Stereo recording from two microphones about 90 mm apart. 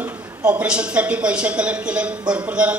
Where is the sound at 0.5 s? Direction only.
15° right (ahead or behind).